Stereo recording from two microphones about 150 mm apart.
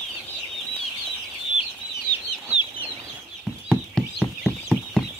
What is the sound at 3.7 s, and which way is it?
Horse, 5° left (ahead or behind).